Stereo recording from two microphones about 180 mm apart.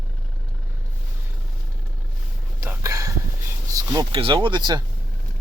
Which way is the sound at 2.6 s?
15° right (ahead or behind).